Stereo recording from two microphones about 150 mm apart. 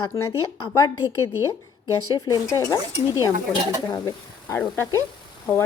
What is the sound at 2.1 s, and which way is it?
Speech, 25° left (ahead or behind).